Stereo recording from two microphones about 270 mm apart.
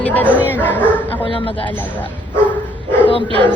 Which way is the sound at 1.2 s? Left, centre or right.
Centre.